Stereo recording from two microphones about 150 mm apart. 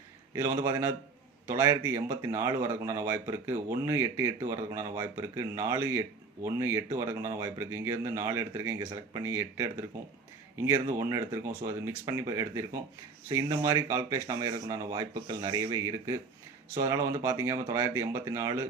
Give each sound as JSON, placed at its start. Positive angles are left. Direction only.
{"t": 0.3, "sound": "a man's voice", "side_deg": -20}